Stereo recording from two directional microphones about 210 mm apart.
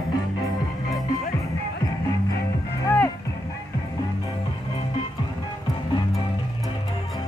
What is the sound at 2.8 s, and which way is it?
Music, 10° left (ahead or behind).